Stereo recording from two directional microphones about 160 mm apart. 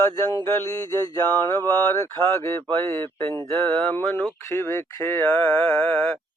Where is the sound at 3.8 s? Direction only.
5° left (ahead or behind).